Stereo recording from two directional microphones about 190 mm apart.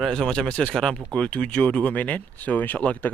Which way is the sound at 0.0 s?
Centre (ahead or behind).